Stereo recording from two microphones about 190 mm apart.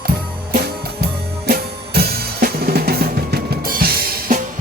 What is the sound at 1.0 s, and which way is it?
Drum kit, 55° right (ahead or behind).